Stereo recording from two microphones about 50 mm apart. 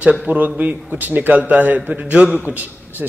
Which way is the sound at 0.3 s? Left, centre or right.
Right.